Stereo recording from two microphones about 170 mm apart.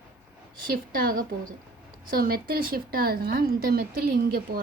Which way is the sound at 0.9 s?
60° right (ahead or behind).